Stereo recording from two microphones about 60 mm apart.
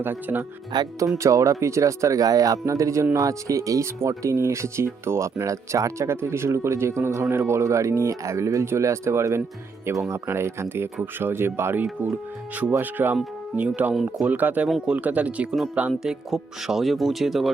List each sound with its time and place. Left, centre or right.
0.0 s speech: right
1.2 s speech: right
11.0 s speech: right
12.8 s speech: right
13.9 s speech: centre
14.3 s speech: right
15.9 s speech: centre